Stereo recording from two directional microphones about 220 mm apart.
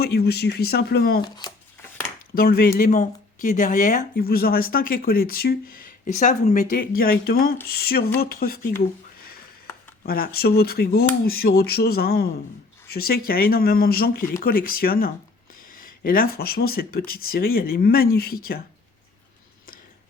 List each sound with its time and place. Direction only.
0.0 s speech: 45° left (ahead or behind)
1.2 s speech: 20° left (ahead or behind)
2.3 s speech: 45° left (ahead or behind)
10.0 s speech: 45° left (ahead or behind)